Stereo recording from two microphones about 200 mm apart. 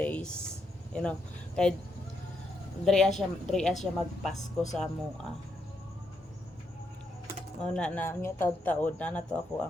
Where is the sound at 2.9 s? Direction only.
Centre (ahead or behind).